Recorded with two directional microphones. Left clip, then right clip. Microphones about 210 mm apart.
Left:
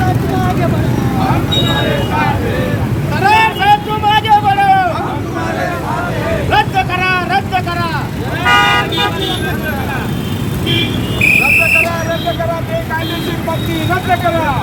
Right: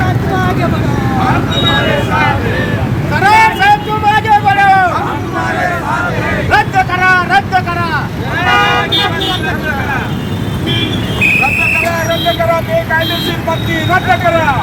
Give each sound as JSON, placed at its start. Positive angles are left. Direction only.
{"t": 3.2, "sound": "vehicle", "side_deg": 0}
{"t": 6.5, "sound": "vehicle", "side_deg": 10}
{"t": 8.4, "sound": "vehicle", "side_deg": 40}